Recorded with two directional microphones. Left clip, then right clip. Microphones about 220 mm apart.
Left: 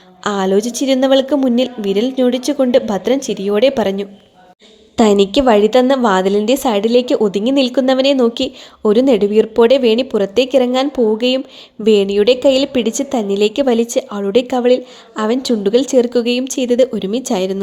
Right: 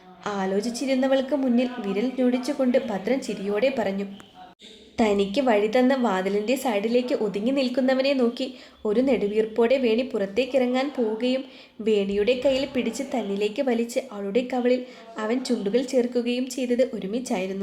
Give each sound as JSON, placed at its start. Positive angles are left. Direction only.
{"t": 0.2, "sound": "a woman's voice", "side_deg": 45}